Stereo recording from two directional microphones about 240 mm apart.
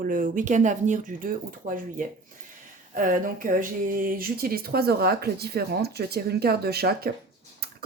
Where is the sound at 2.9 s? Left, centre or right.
Right.